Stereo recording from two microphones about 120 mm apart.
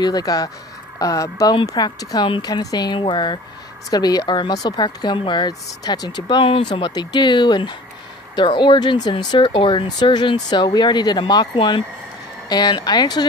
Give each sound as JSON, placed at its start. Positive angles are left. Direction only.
{"t": 0.0, "sound": "speech", "side_deg": 30}